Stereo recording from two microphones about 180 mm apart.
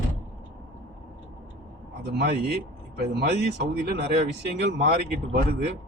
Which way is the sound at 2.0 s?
65° right (ahead or behind).